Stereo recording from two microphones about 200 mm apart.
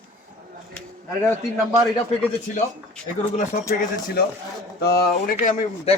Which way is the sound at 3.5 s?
30° left (ahead or behind).